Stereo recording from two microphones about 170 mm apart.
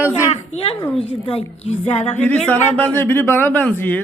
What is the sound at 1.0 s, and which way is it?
A woman's voice, 35° left (ahead or behind).